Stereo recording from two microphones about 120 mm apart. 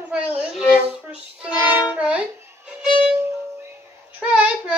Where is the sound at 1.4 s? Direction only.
10° right (ahead or behind).